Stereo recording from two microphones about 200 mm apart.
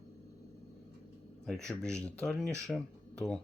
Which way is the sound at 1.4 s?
Centre (ahead or behind).